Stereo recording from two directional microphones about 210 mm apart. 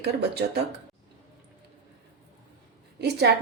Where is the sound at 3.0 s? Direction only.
50° right (ahead or behind).